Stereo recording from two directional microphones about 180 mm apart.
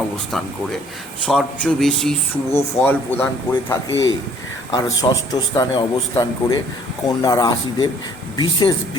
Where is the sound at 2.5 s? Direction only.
15° left (ahead or behind).